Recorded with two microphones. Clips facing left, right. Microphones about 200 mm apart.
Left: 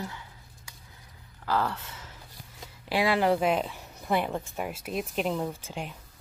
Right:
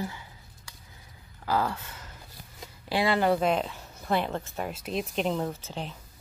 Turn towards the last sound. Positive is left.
turn(degrees=10)  # may be behind; listen again after turning